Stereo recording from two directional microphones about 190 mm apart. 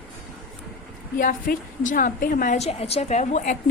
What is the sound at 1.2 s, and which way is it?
A woman's voice, 45° left (ahead or behind).